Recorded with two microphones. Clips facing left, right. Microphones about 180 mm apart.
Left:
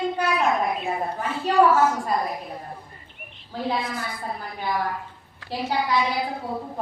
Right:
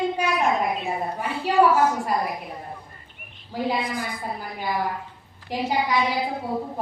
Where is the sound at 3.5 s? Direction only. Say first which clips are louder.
Right 1 dB; 10° right (ahead or behind).